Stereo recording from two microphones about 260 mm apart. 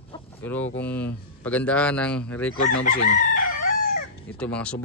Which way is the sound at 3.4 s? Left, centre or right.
Left.